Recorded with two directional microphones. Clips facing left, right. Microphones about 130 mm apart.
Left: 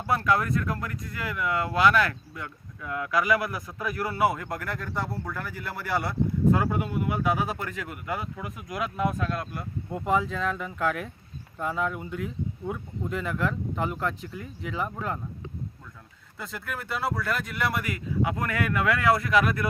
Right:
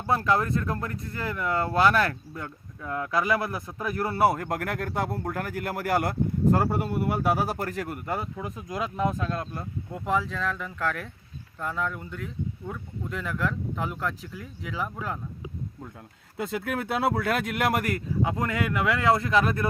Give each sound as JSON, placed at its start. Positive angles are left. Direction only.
{"t": 0.1, "sound": "speech", "side_deg": -25}
{"t": 9.9, "sound": "speech", "side_deg": 0}
{"t": 17.1, "sound": "speech", "side_deg": -70}
{"t": 18.2, "sound": "speech", "side_deg": -25}